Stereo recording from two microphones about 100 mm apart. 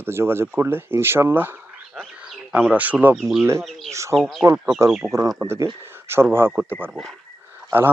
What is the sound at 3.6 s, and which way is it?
Speech, centre (ahead or behind).